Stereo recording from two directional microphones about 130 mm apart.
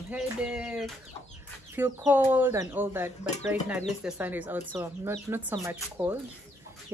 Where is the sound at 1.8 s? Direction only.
15° right (ahead or behind).